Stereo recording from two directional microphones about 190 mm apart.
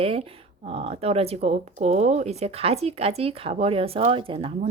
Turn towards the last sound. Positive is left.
turn(degrees=-30)  # may be behind; listen again after turning